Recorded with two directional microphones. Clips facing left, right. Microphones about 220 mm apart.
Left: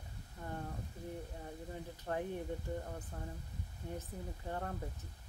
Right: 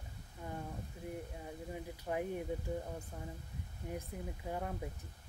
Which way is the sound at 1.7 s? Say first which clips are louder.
Right 1 dB; 10° right (ahead or behind).